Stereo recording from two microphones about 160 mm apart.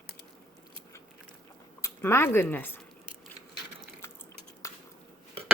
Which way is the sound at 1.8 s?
15° left (ahead or behind).